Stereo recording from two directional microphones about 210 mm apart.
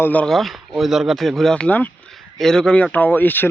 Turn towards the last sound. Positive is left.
turn(degrees=10)  # may be behind; listen again after turning